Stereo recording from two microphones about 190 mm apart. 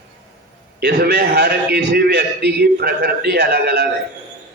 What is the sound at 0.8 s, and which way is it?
A man's voice, 60° right (ahead or behind).